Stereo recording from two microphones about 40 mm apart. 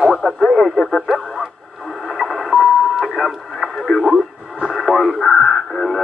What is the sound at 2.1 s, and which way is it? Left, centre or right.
Radio, centre.